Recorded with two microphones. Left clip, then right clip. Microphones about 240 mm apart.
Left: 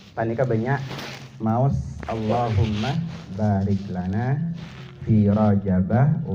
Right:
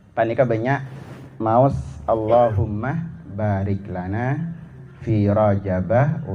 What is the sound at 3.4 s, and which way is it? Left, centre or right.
Speech, right.